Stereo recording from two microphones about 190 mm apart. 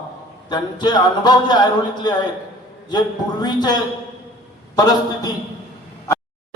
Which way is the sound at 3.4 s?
20° left (ahead or behind).